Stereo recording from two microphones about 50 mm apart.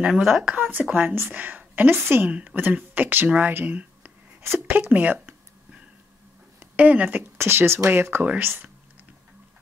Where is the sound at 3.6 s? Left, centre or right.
Right.